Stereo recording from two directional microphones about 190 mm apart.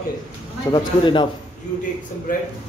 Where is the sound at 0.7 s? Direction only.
25° left (ahead or behind).